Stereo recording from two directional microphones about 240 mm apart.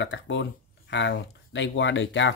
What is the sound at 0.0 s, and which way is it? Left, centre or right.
Speech, left.